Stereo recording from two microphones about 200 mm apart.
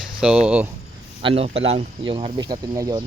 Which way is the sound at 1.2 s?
30° right (ahead or behind).